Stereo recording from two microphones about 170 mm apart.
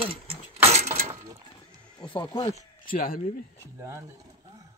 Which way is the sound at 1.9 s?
25° left (ahead or behind).